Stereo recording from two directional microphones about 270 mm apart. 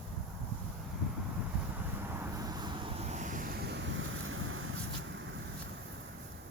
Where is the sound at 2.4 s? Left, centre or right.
Centre; by 4.7 s right.